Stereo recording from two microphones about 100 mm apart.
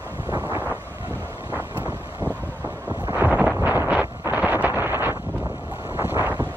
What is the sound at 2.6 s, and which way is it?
Wind noise, 20° right (ahead or behind).